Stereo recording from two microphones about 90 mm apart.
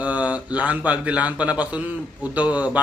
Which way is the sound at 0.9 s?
15° right (ahead or behind).